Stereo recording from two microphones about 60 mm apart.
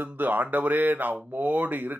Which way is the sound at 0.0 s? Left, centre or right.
Right.